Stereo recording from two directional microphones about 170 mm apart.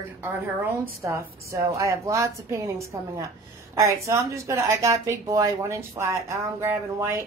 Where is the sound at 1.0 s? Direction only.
15° right (ahead or behind).